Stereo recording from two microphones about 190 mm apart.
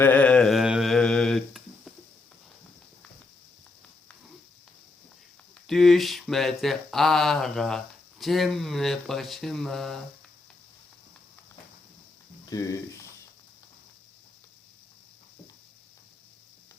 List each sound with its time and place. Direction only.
0.0 s a sound: 10° left (ahead or behind)
5.6 s speech: centre (ahead or behind)
12.5 s speech: 20° left (ahead or behind)